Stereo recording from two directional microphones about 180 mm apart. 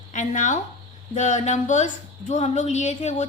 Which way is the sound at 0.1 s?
45° left (ahead or behind).